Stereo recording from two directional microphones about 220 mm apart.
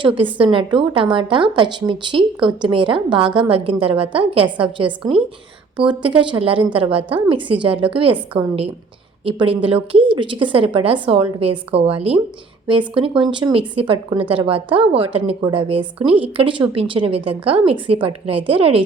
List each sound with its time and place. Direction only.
0.3 s a woman's voice: 25° right (ahead or behind)